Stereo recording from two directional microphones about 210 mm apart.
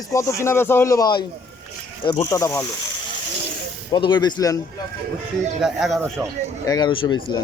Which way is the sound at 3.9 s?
20° left (ahead or behind).